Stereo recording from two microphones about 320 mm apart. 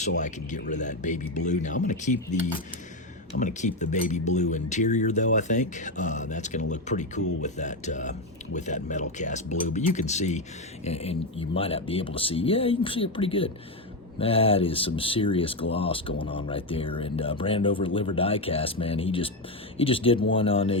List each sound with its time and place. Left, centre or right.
0.2 s speech: left
7.2 s speech: left
7.4 s speech: left